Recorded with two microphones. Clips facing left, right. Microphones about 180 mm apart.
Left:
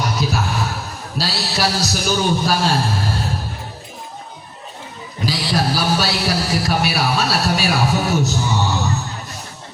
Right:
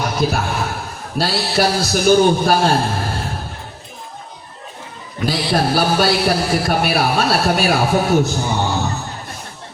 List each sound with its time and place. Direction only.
0.0 s a sound: 55° right (ahead or behind)
1.2 s a man's voice: 55° right (ahead or behind)
5.2 s a man's voice: 55° right (ahead or behind)